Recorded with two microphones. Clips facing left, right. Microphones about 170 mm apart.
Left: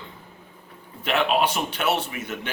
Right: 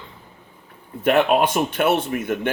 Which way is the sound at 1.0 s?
50° right (ahead or behind).